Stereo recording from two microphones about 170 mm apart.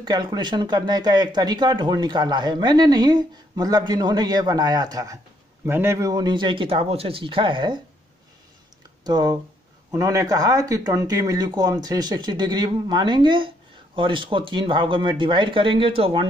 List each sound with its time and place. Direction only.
0.0 s speech: 25° right (ahead or behind)
9.0 s speech: 25° right (ahead or behind)